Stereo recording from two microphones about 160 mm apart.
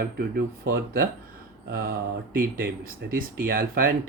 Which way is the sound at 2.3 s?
65° right (ahead or behind).